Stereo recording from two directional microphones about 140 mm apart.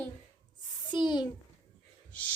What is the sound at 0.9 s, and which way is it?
Speech, 30° left (ahead or behind).